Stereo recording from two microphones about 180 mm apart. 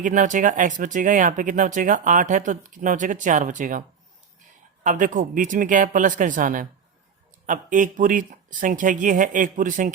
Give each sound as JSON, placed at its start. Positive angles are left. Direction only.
{"t": 0.0, "sound": "speech", "side_deg": -45}